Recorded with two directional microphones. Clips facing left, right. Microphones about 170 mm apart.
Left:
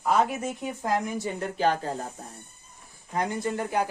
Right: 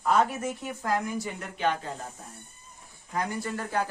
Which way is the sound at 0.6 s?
20° left (ahead or behind).